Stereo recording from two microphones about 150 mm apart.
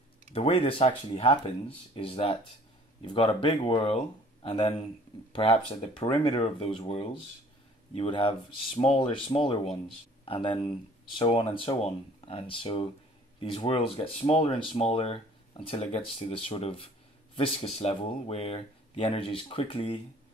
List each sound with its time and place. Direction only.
0.3 s speech: 40° left (ahead or behind)
7.9 s speech: 40° left (ahead or behind)